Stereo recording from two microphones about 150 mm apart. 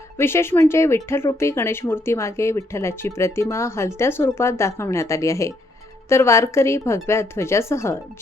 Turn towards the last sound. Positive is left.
turn(degrees=20)  # may be behind; listen again after turning